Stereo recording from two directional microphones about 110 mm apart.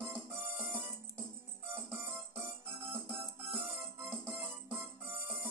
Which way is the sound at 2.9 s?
20° right (ahead or behind).